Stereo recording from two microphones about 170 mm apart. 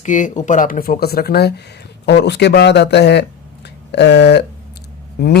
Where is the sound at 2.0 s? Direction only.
90° left; by 5.3 s 70° left (ahead or behind).